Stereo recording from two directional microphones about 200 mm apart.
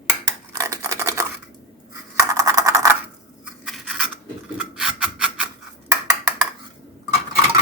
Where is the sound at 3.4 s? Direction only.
Centre (ahead or behind).